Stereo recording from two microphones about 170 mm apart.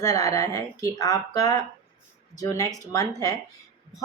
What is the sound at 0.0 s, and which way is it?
Speech, 20° left (ahead or behind).